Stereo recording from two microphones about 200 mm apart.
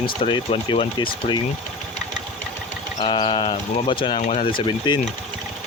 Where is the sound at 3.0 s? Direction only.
25° left (ahead or behind).